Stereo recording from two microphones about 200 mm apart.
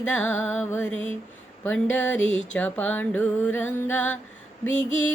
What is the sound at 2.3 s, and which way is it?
Female singing, 35° left (ahead or behind).